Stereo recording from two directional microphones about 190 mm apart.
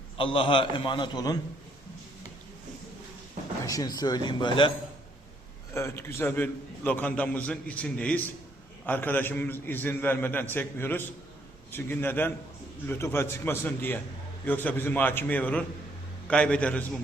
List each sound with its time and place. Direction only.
0.2 s a man's voice: 30° left (ahead or behind)
3.6 s a man's voice: 15° left (ahead or behind)
5.7 s a man's voice: 15° left (ahead or behind)